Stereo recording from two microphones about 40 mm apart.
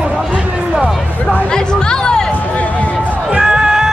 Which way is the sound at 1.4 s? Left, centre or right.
Centre.